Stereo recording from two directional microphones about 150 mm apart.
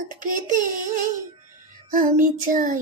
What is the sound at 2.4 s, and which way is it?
Child singing, 60° right (ahead or behind).